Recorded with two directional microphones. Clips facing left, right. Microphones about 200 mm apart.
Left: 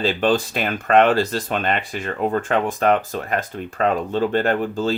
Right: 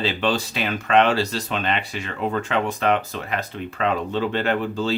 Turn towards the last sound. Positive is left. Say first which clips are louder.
# left 2 dB
turn(degrees=45)  # may be behind; listen again after turning